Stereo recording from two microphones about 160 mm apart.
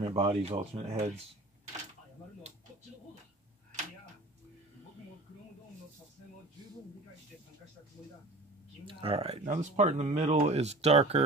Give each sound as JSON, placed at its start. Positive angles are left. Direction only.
{"t": 0.0, "sound": "speech", "side_deg": -40}
{"t": 8.8, "sound": "speech", "side_deg": -35}
{"t": 9.4, "sound": "speech", "side_deg": -50}